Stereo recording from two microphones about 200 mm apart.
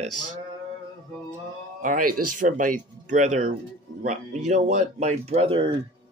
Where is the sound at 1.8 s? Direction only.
40° right (ahead or behind).